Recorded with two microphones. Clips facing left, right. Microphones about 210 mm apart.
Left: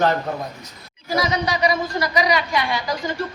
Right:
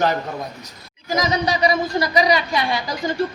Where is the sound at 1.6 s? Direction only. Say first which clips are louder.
Right 2 dB; 30° right (ahead or behind).